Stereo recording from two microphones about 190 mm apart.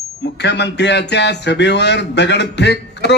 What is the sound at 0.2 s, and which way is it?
A man's voice, 65° left (ahead or behind).